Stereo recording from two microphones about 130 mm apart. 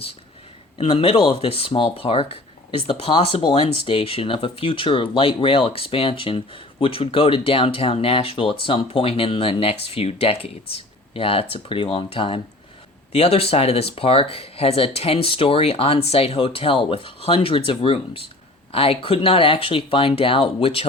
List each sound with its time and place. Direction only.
0.8 s speech: 45° left (ahead or behind)